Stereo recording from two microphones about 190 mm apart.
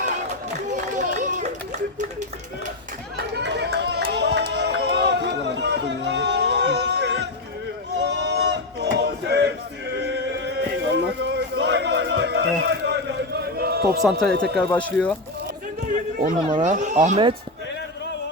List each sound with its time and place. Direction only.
0.7 s run: 40° right (ahead or behind)
3.2 s a sound: 65° right (ahead or behind)
14.0 s speech: centre (ahead or behind)
15.9 s speech: 45° right (ahead or behind)